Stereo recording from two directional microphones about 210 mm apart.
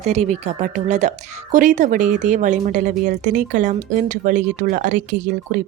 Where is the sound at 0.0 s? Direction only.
30° right (ahead or behind).